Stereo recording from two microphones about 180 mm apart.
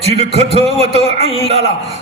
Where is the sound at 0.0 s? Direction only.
35° right (ahead or behind).